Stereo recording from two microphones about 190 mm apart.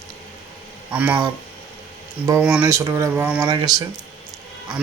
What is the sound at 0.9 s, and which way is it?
Speech, 5° right (ahead or behind).